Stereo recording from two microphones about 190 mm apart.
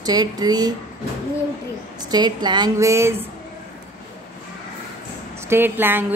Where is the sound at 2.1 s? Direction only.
20° right (ahead or behind).